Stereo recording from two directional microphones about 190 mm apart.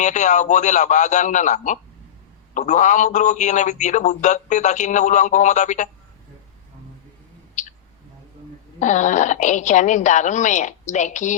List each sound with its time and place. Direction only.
0.0 s a man's voice: 40° left (ahead or behind)
7.6 s a sound: 40° left (ahead or behind)
8.8 s a man's voice: 40° left (ahead or behind)